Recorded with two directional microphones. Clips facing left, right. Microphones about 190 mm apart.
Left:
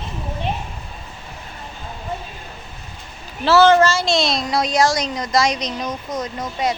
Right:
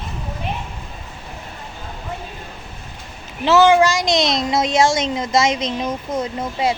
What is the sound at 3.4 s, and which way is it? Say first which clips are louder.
A woman's voice: even; 15° right (ahead or behind).